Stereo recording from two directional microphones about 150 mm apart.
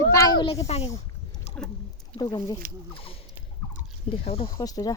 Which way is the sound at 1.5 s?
45° left (ahead or behind).